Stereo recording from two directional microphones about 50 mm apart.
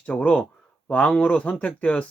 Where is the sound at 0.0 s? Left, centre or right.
Left.